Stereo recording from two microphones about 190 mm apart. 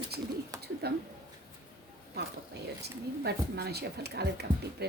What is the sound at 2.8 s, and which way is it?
A woman's voice, 60° right (ahead or behind).